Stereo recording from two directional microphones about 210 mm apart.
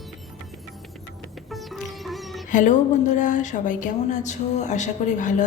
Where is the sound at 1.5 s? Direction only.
Centre (ahead or behind).